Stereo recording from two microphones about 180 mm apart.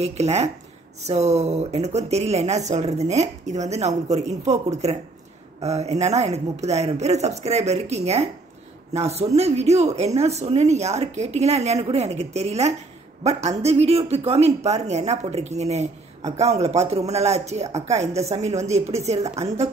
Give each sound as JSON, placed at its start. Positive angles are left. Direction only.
{"t": 0.0, "sound": "a man's voice", "side_deg": -35}